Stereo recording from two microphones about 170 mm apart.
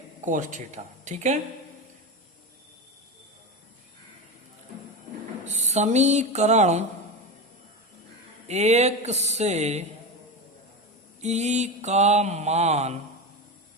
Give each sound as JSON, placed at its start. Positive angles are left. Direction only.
{"t": 0.3, "sound": "speech", "side_deg": -45}
{"t": 5.5, "sound": "speech", "side_deg": -40}
{"t": 8.4, "sound": "mantra", "side_deg": -40}
{"t": 11.2, "sound": "mantra", "side_deg": -40}